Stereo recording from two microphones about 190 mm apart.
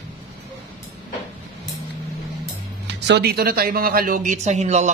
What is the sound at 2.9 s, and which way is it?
Speech, 60° right (ahead or behind).